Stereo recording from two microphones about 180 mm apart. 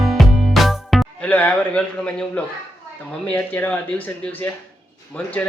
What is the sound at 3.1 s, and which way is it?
Speech, 10° left (ahead or behind).